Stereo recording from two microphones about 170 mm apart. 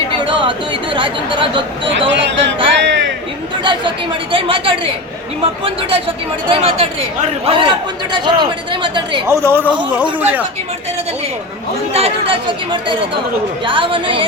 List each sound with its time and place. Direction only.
0.1 s chatter: 30° right (ahead or behind)
2.0 s speech: 90° right
2.8 s a sound: 90° right
3.6 s a woman's voice: 30° right (ahead or behind)
9.2 s speech: 15° right (ahead or behind)
11.9 s a woman's voice: 35° right (ahead or behind)